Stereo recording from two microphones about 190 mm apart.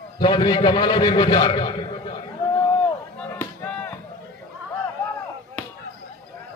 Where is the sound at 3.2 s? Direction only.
10° left (ahead or behind).